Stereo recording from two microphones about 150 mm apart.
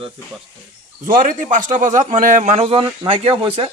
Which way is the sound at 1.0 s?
60° right (ahead or behind).